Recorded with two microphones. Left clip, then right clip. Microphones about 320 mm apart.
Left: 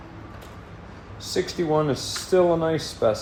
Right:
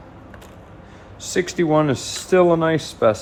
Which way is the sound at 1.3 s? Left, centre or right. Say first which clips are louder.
Right 5 dB; right.